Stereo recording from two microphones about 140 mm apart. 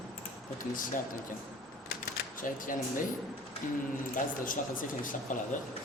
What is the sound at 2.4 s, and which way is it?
Speech, 75° left (ahead or behind).